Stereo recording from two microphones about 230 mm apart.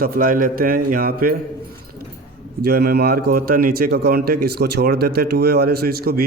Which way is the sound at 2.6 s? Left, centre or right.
Right.